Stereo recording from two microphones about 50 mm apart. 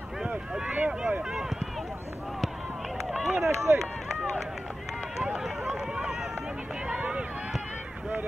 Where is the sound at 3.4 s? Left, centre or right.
Right.